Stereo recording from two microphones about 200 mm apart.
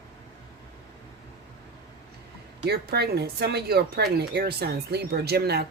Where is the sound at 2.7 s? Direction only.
55° right (ahead or behind).